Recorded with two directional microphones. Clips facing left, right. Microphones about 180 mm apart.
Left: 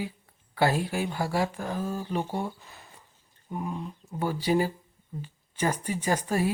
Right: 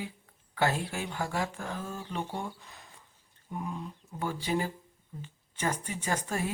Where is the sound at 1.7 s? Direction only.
10° left (ahead or behind).